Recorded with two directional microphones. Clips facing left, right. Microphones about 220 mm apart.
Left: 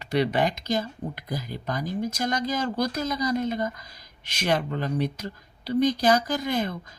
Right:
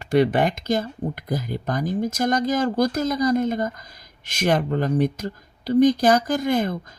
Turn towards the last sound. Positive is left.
turn(degrees=-50)  # may be behind; listen again after turning